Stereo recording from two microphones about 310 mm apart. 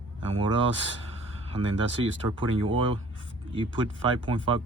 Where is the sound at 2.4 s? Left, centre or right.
Centre.